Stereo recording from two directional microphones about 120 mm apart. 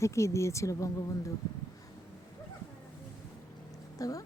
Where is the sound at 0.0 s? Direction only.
25° left (ahead or behind).